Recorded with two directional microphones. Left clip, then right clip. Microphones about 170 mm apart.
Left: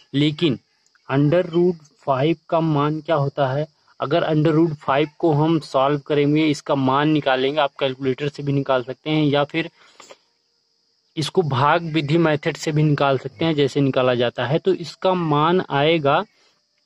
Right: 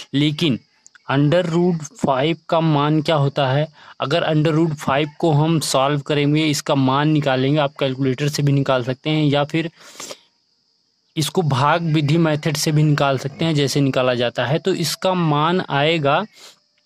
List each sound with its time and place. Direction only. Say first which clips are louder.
0.1 s speech: right 1 dB; 35° right (ahead or behind)
11.1 s speech: even; 40° right (ahead or behind)